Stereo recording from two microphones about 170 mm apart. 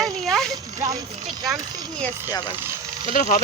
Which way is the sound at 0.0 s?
Centre (ahead or behind).